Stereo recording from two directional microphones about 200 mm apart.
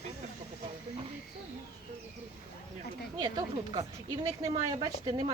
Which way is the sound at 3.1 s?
20° right (ahead or behind).